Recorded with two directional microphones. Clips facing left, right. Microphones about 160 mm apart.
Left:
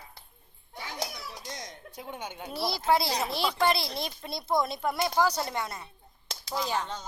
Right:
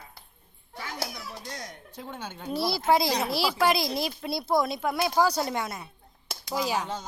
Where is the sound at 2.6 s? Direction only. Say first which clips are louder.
Right 3 dB; 5° right (ahead or behind).